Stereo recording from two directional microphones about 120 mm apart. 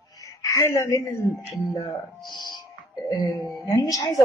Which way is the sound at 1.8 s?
35° left (ahead or behind).